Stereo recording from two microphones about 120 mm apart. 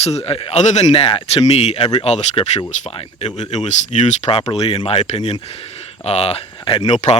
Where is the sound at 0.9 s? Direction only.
55° left (ahead or behind); by 4.2 s 75° left (ahead or behind).